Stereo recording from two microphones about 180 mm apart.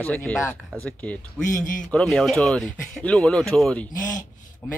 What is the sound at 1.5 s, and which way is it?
Speech, 45° left (ahead or behind).